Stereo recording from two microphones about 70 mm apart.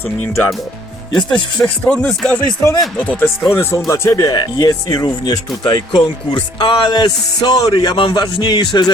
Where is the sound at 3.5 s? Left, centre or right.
Left.